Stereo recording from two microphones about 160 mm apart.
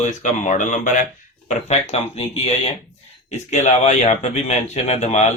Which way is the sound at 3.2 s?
45° left (ahead or behind).